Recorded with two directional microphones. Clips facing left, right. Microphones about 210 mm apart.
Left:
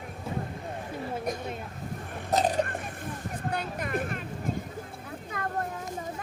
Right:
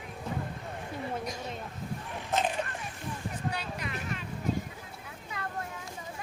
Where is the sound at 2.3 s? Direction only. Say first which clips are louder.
Left 5 dB; 35° left (ahead or behind).